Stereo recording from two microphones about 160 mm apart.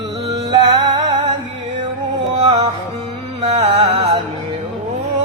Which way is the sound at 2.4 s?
35° right (ahead or behind).